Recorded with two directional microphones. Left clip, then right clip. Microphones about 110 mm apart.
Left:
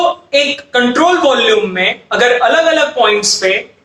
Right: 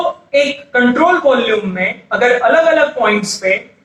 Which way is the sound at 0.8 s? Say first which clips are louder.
Left 1 dB; 35° left (ahead or behind).